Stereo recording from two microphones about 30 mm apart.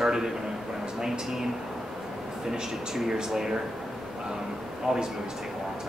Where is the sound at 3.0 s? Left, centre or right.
Centre.